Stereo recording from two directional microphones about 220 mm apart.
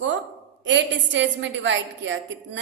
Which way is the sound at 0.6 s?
55° right (ahead or behind).